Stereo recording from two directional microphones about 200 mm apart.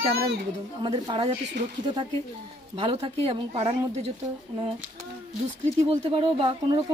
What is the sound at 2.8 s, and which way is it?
A woman's voice, 25° right (ahead or behind).